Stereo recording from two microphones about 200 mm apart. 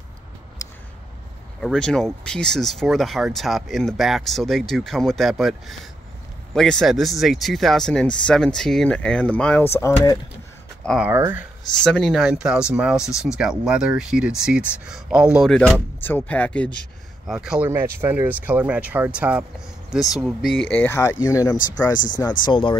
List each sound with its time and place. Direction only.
1.6 s speech: 5° left (ahead or behind)
10.9 s speech: 5° right (ahead or behind)
11.8 s speech: 5° left (ahead or behind)
21.9 s speech: 40° left (ahead or behind)
22.4 s speech: 25° left (ahead or behind)